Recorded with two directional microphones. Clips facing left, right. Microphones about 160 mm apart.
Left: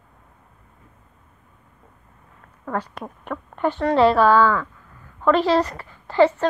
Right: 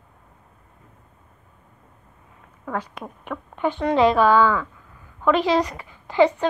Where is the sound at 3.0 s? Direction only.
5° right (ahead or behind).